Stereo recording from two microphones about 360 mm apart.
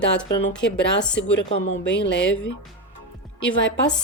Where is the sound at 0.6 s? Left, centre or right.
Left.